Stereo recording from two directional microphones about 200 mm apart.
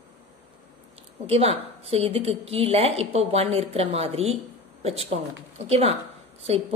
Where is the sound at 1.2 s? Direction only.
30° right (ahead or behind).